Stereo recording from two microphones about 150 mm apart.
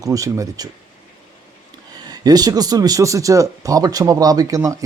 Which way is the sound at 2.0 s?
25° right (ahead or behind).